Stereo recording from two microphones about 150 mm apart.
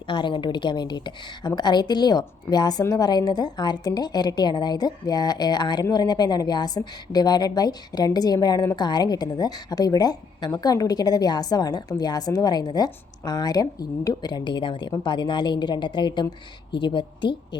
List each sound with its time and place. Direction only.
0.1 s a woman's voice: 30° left (ahead or behind)